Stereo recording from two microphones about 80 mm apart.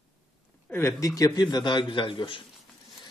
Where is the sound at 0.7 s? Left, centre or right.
Left.